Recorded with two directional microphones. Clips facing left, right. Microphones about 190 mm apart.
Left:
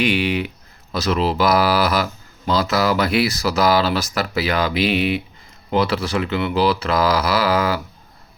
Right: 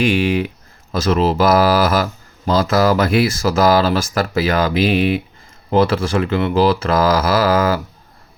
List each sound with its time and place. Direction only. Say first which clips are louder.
0.0 s speech: right 3 dB; 45° right (ahead or behind)